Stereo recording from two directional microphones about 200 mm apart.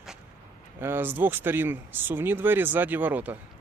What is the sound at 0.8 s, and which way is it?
Speech, 10° right (ahead or behind).